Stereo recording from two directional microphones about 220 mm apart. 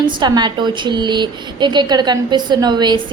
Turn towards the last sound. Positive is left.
turn(degrees=-20)  # may be behind; listen again after turning